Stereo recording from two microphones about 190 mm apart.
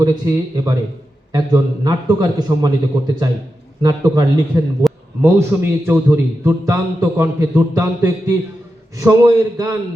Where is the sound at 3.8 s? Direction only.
20° right (ahead or behind).